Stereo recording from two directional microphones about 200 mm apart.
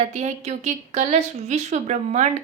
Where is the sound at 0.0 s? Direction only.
35° right (ahead or behind).